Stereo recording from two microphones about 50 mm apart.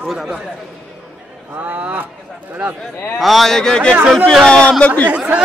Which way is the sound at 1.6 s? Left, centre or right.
Right.